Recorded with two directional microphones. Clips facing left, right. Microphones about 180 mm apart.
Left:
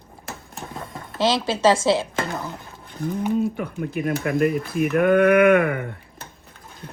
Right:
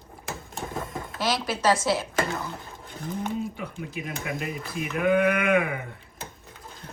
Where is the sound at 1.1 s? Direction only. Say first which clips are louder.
Left 6 dB; 25° left (ahead or behind).